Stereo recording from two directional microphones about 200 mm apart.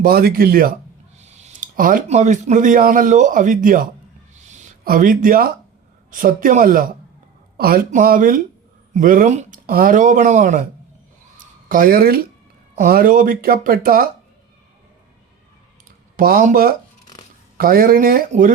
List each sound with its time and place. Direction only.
0.0 s speech: 50° right (ahead or behind)
1.2 s a man's voice: 35° right (ahead or behind)
4.4 s a sound: 35° right (ahead or behind)
6.1 s speech: 45° right (ahead or behind)
11.7 s speech: 45° right (ahead or behind)
16.1 s speech: 45° right (ahead or behind)